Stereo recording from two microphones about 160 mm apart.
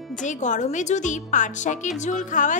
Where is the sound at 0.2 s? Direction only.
50° left (ahead or behind).